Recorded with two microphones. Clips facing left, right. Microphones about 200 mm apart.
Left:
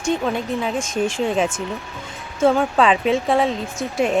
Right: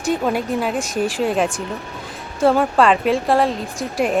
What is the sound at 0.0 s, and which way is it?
Speech, 5° right (ahead or behind).